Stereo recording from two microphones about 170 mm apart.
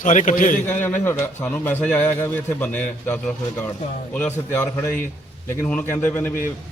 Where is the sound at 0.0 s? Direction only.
50° left (ahead or behind).